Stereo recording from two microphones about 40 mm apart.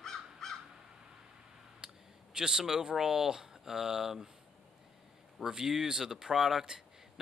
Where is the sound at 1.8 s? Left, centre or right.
Right.